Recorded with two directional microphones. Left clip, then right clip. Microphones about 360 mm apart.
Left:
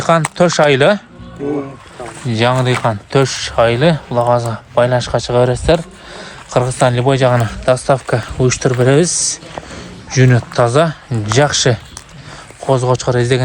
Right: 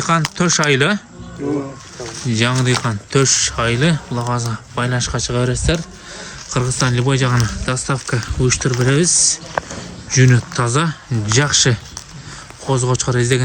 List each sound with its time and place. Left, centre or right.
0.0 s speech: centre
2.2 s speech: centre